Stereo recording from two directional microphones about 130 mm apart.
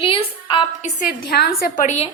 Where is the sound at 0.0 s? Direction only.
40° left (ahead or behind).